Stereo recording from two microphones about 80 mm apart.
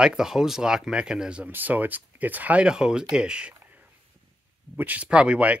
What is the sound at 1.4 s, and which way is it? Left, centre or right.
Speech, right.